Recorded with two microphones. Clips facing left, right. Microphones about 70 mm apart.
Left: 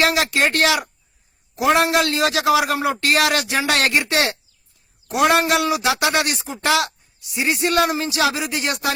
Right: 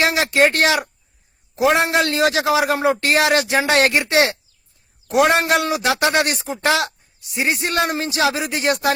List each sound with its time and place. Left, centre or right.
0.0 s a man's voice: right
5.1 s a man's voice: right